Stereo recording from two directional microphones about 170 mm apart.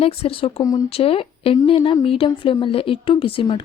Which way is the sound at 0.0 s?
35° left (ahead or behind).